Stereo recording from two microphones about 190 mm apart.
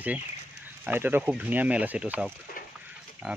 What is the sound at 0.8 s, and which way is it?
Speech, 10° right (ahead or behind).